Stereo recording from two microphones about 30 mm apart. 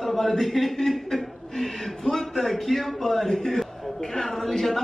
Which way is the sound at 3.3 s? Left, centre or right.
Left.